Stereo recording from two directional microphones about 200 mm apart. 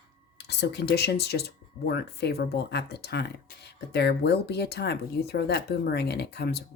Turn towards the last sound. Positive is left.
turn(degrees=55)  # may be behind; listen again after turning